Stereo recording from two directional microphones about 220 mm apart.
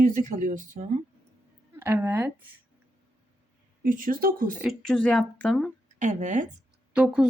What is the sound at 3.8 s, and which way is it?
Speech, 40° right (ahead or behind).